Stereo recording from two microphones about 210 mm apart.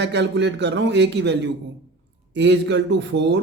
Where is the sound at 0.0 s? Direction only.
55° right (ahead or behind).